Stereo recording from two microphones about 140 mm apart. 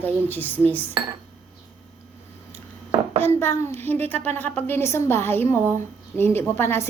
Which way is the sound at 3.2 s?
15° left (ahead or behind).